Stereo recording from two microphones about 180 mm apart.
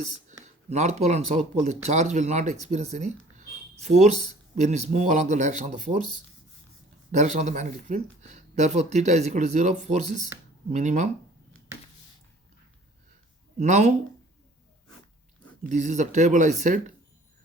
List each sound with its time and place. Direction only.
0.4 s speech: 40° right (ahead or behind)
7.1 s speech: 40° right (ahead or behind)
13.6 s speech: 40° right (ahead or behind)
15.7 s speech: 40° right (ahead or behind)